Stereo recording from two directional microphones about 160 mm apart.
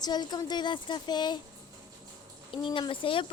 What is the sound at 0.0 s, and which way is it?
Speech, 25° left (ahead or behind).